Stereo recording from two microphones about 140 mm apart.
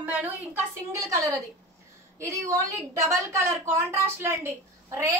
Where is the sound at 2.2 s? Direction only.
20° right (ahead or behind).